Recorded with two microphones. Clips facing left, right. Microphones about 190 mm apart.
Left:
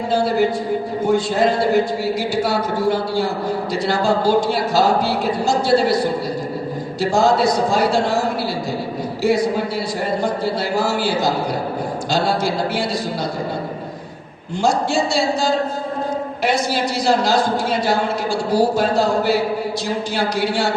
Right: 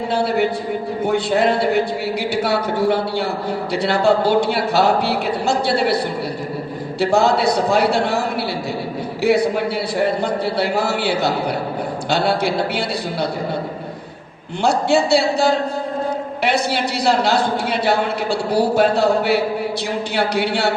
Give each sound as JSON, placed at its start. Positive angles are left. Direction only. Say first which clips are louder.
{"t": 0.1, "sound": "a man's voice", "louder": "left 2 dB", "side_deg": -65}
{"t": 9.2, "sound": "a man's voice", "louder": "right 1 dB", "side_deg": -65}
{"t": 14.6, "sound": "a man's voice", "louder": "right 2 dB", "side_deg": -65}